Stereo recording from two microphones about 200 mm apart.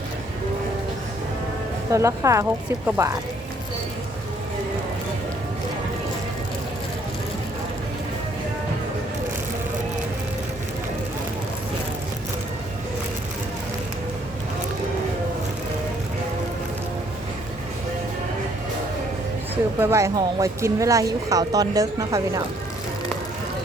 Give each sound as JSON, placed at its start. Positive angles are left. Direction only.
{"t": 1.9, "sound": "speech", "side_deg": -15}
{"t": 19.8, "sound": "speech", "side_deg": -15}